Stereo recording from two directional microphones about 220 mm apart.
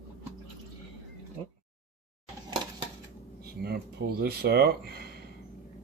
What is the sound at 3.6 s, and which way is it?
Speech, 45° right (ahead or behind).